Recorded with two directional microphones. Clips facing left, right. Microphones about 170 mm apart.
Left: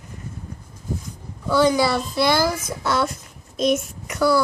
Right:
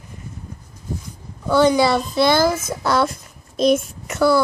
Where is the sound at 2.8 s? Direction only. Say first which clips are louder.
Right 3 dB; 40° right (ahead or behind).